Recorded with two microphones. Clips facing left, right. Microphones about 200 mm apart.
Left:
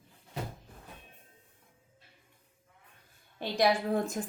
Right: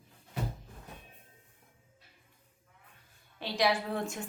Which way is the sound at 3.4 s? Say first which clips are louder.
Left 2 dB; 50° left (ahead or behind).